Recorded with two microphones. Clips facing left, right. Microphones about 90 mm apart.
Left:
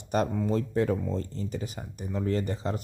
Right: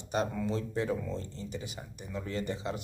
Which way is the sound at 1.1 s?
40° left (ahead or behind).